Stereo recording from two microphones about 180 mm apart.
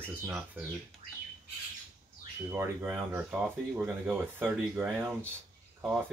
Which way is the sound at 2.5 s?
10° right (ahead or behind).